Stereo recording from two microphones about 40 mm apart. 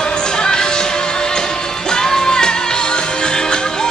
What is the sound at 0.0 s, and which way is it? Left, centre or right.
Music, centre.